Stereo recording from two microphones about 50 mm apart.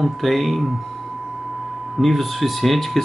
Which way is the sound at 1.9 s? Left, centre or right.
Centre.